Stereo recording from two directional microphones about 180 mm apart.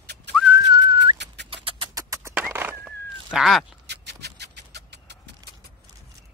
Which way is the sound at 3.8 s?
70° right (ahead or behind).